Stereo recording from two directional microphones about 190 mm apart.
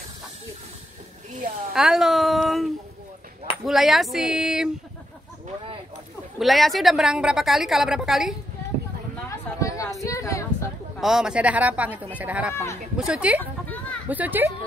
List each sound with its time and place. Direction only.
1.7 s a woman's voice: centre (ahead or behind)
6.4 s a woman's voice: centre (ahead or behind)
9.6 s a sound: 15° left (ahead or behind)
11.0 s a woman's voice: centre (ahead or behind)
13.4 s a sound: 10° left (ahead or behind)
14.0 s speech: 10° right (ahead or behind)